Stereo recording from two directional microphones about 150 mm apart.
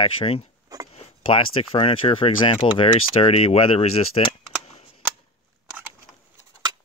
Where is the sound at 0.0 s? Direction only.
40° left (ahead or behind).